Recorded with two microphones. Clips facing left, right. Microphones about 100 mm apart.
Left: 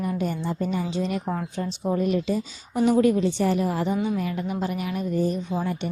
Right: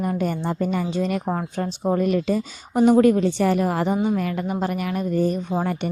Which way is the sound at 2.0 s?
55° right (ahead or behind).